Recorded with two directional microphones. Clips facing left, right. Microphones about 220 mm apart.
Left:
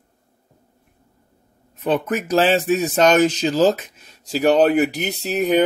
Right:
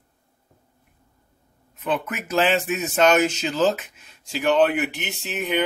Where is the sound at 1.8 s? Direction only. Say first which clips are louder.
Left 6 dB; 35° left (ahead or behind).